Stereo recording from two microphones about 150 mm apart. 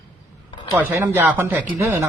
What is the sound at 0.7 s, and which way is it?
Speech, 15° right (ahead or behind).